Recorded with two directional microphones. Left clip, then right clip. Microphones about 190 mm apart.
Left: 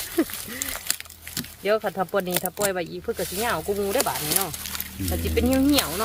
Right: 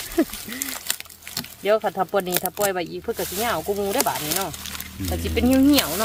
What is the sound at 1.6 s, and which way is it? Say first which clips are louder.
Speech: right 3 dB; 30° right (ahead or behind).